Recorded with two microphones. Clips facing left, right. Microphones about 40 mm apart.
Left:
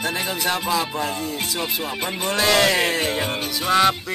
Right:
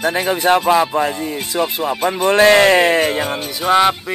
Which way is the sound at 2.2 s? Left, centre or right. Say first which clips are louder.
Right 8 dB; right.